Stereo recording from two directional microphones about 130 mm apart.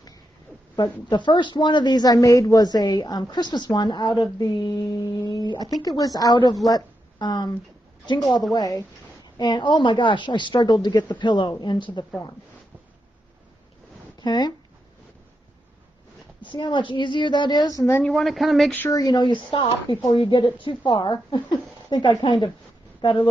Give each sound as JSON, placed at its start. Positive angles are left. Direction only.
{"t": 1.0, "sound": "a woman's voice", "side_deg": 35}
{"t": 8.5, "sound": "a woman's voice", "side_deg": 25}
{"t": 14.2, "sound": "speech", "side_deg": 35}
{"t": 16.4, "sound": "speech", "side_deg": 35}
{"t": 18.0, "sound": "a woman's voice", "side_deg": 0}
{"t": 18.7, "sound": "speech", "side_deg": 15}
{"t": 18.9, "sound": "speech", "side_deg": 30}
{"t": 22.9, "sound": "a sound", "side_deg": 40}